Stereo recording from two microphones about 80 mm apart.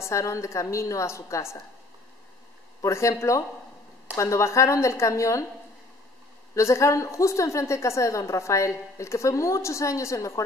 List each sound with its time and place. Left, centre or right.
0.0 s a woman's voice: left
2.8 s a woman's voice: left
6.5 s a woman's voice: left